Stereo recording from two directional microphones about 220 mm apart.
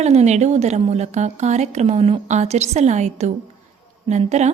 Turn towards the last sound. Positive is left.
turn(degrees=-30)  # may be behind; listen again after turning